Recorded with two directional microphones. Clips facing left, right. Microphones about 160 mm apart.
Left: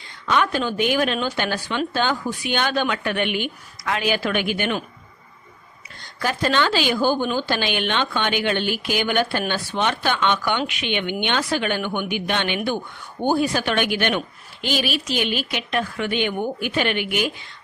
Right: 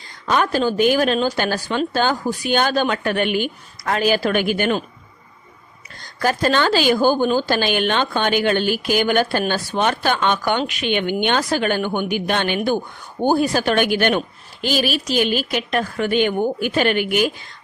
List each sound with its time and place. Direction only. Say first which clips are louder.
0.3 s a woman's voice: right 3 dB; 40° right (ahead or behind)
6.1 s a woman's voice: right 3 dB; 40° right (ahead or behind)